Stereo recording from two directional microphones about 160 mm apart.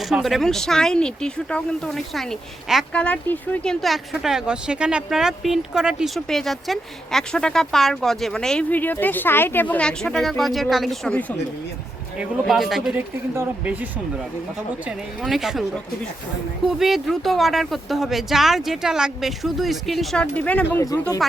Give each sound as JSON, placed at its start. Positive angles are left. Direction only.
{"t": 0.0, "sound": "speech", "side_deg": 0}
{"t": 14.8, "sound": "speech", "side_deg": 0}
{"t": 16.6, "sound": "speech", "side_deg": 0}